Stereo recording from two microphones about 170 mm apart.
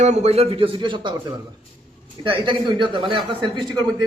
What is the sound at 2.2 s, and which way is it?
Speech, 30° right (ahead or behind).